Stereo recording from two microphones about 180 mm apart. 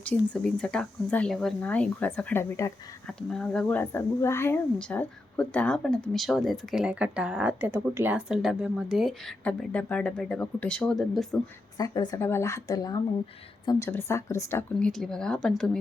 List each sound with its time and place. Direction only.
0.1 s speech: 5° left (ahead or behind)
3.1 s a woman's voice: 5° left (ahead or behind)
11.8 s speech: 20° left (ahead or behind)
14.8 s a woman's voice: 5° left (ahead or behind)